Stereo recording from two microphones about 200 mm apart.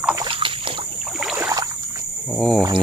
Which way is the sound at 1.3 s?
15° right (ahead or behind).